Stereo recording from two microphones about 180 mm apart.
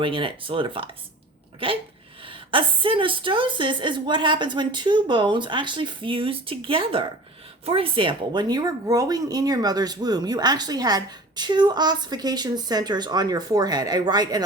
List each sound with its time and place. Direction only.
0.0 s speech: 30° right (ahead or behind)